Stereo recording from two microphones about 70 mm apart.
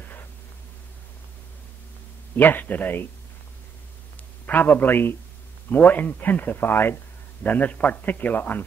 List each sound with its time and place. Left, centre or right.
0.0 s white noise: left
2.3 s speech: left
4.5 s speech: left